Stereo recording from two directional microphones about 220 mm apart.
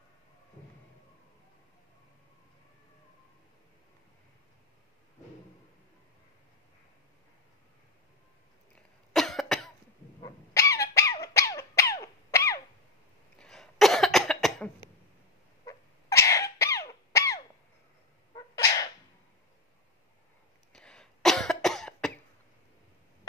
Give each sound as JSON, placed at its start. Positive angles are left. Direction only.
{"t": 9.1, "sound": "cough", "side_deg": 0}
{"t": 10.2, "sound": "dog", "side_deg": 15}
{"t": 13.4, "sound": "cough", "side_deg": 0}
{"t": 15.6, "sound": "a sound", "side_deg": 15}
{"t": 18.3, "sound": "sneeze", "side_deg": 15}
{"t": 20.7, "sound": "cough", "side_deg": 5}